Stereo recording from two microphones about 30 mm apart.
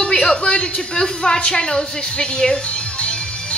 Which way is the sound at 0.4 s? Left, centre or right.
Left.